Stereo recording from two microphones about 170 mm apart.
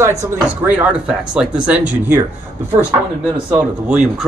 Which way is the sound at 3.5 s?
5° right (ahead or behind).